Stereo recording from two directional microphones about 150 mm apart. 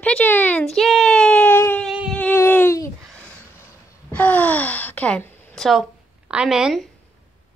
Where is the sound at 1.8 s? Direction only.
5° right (ahead or behind).